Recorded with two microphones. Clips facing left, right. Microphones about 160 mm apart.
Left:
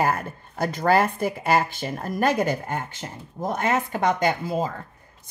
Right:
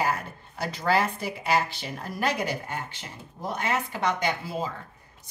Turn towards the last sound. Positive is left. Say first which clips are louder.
# left 6 dB
turn(degrees=50)  # may be behind; listen again after turning